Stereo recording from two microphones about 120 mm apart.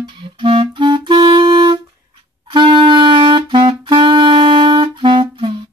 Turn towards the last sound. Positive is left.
turn(degrees=-40)  # may be behind; listen again after turning